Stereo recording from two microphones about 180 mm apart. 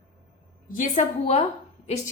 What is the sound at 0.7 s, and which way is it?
Speech, 45° left (ahead or behind).